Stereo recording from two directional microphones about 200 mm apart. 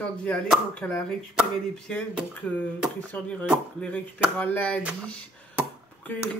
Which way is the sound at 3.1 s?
10° left (ahead or behind).